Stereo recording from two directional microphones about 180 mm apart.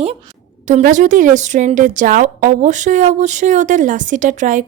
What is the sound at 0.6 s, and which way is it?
Speech, 45° right (ahead or behind).